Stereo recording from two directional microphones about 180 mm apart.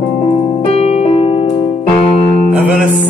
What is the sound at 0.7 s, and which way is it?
Music, 35° left (ahead or behind).